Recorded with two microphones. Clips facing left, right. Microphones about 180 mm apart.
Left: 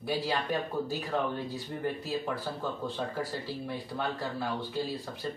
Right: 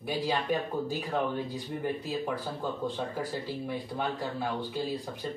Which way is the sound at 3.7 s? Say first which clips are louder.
Right 1 dB; 15° right (ahead or behind).